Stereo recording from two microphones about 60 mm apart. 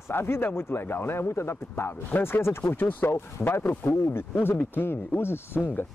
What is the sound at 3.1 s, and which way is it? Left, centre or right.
Speech, left.